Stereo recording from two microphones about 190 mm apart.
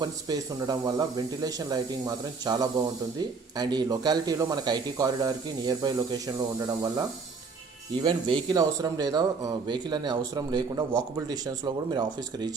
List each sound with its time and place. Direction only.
0.0 s speech: 20° right (ahead or behind)
8.0 s speech: 25° right (ahead or behind)